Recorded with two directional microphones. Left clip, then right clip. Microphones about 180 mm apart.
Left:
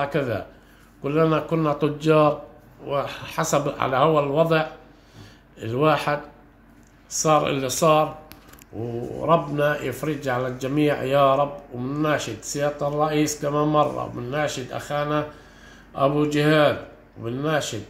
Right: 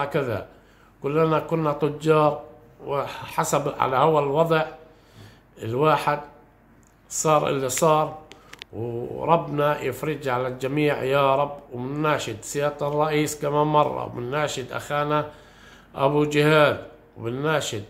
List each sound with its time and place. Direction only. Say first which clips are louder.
0.0 s speech: left 1 dB; 15° right (ahead or behind)
9.2 s speech: left 1 dB; 15° right (ahead or behind)